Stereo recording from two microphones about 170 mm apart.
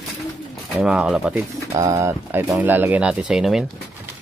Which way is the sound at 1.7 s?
20° right (ahead or behind).